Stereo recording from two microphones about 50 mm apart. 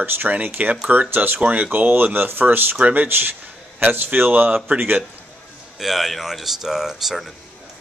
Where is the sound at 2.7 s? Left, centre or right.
Right.